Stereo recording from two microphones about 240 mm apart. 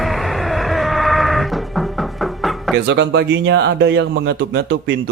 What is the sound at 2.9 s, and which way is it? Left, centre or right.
A man's voice, right.